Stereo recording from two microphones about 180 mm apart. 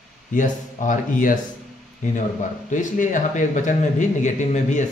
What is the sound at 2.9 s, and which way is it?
A man's voice, 45° left (ahead or behind).